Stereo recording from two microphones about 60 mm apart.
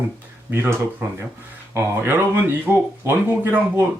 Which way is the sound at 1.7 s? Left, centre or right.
Right.